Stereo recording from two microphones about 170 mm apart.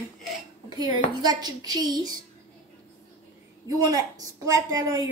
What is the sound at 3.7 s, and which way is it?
A woman's voice, 20° right (ahead or behind).